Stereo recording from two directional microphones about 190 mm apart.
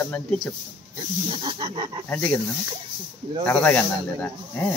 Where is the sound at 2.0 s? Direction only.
10° left (ahead or behind).